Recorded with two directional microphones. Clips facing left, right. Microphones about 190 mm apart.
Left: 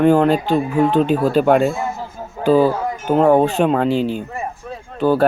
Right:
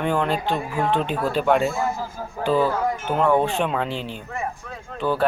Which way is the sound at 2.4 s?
40° left (ahead or behind).